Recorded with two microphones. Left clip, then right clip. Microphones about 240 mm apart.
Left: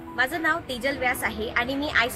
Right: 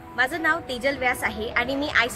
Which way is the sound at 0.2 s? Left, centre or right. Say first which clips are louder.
Right 1 dB; centre.